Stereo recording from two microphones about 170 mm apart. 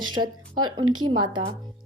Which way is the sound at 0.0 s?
25° right (ahead or behind).